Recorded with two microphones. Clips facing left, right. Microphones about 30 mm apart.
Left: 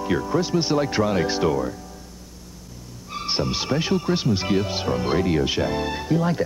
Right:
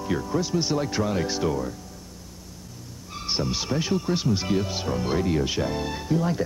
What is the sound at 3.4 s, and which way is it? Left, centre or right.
Speech, centre.